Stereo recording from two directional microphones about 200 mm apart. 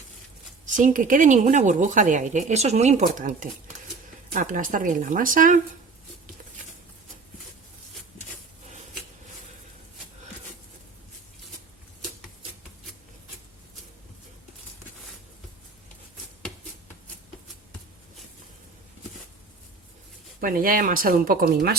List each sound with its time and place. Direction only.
0.8 s speech: 40° right (ahead or behind)
20.4 s speech: 45° right (ahead or behind)